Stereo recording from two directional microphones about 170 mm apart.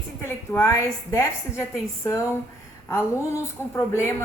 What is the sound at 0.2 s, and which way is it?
A woman's voice, 15° left (ahead or behind).